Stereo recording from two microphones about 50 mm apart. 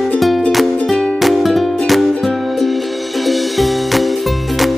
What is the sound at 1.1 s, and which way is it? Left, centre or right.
Music, centre.